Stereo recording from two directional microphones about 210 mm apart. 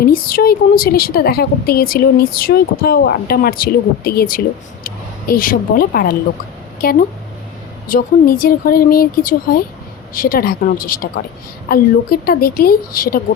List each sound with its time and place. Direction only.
0.0 s a woman's voice: 45° left (ahead or behind)